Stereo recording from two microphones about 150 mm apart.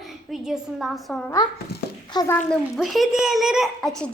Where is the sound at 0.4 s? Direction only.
Centre (ahead or behind).